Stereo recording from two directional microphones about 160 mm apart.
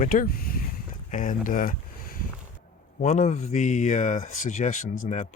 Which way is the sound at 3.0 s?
45° left (ahead or behind).